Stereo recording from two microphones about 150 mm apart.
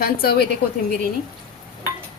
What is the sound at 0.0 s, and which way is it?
Speech, 90° left.